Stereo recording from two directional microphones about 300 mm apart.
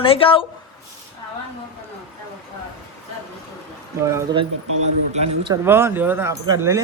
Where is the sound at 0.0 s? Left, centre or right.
Centre.